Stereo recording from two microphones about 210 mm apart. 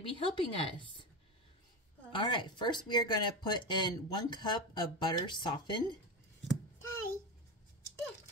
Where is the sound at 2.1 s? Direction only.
20° left (ahead or behind).